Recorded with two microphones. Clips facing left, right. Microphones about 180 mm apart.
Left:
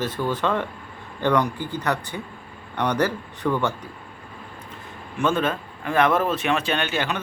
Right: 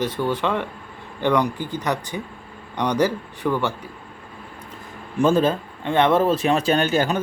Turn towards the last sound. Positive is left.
turn(degrees=-40)  # may be behind; listen again after turning